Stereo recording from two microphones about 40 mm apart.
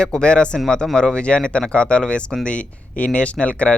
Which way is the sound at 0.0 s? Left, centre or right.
Left.